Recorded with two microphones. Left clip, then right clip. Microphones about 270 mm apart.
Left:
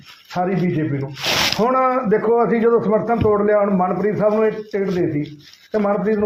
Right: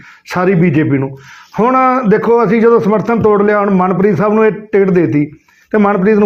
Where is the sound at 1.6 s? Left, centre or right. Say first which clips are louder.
Right 12 dB; right.